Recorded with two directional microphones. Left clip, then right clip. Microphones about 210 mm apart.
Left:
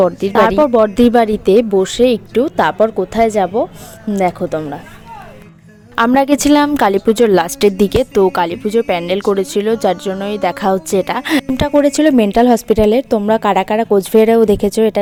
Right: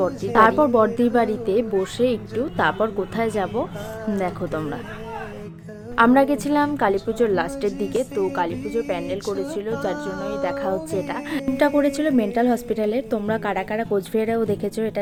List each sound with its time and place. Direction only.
0.0 s speech: 40° left (ahead or behind); by 4.8 s 25° left (ahead or behind)
6.0 s a woman's voice: 45° left (ahead or behind)